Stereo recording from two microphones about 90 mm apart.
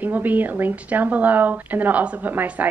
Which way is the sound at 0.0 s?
20° right (ahead or behind).